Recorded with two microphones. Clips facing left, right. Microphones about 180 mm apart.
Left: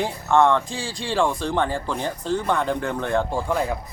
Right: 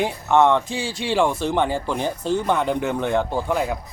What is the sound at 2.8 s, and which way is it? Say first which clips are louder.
Speech: right 2 dB; 5° right (ahead or behind).